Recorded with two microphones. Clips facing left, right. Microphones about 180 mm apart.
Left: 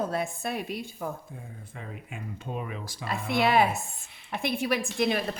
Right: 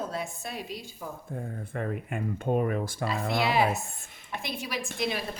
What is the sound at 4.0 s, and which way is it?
Speech, 50° right (ahead or behind).